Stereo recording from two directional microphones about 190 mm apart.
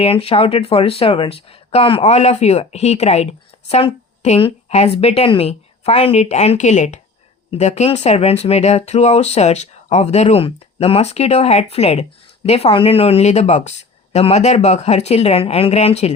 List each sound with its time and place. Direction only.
0.0 s speech: 30° left (ahead or behind)